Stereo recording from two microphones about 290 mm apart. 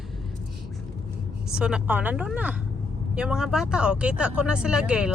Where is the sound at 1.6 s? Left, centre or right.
Centre.